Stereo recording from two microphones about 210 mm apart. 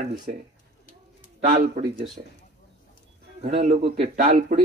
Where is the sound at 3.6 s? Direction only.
30° right (ahead or behind).